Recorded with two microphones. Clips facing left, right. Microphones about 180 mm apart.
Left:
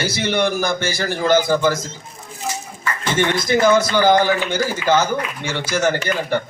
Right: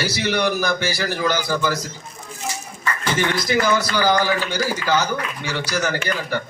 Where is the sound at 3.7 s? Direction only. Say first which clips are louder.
Left 4 dB; 25° left (ahead or behind).